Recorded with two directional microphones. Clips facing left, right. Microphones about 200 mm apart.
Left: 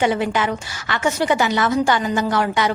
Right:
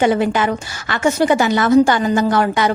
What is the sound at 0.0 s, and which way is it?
A woman's voice, 45° right (ahead or behind).